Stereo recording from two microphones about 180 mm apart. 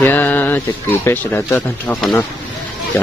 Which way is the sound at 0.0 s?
10° left (ahead or behind).